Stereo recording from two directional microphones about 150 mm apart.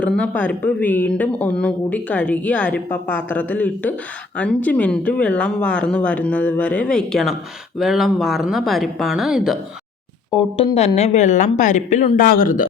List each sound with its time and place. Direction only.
0.0 s speech: 10° left (ahead or behind)
10.6 s a woman's voice: 45° left (ahead or behind); by 12.6 s 65° left (ahead or behind)